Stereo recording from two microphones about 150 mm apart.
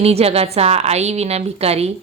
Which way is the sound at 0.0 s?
40° right (ahead or behind).